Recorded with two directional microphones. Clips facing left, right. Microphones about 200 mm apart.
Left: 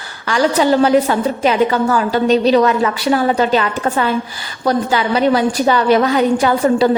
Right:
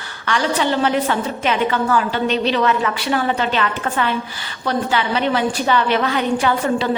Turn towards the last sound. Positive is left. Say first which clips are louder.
# left 5 dB
turn(degrees=40)  # may be behind; listen again after turning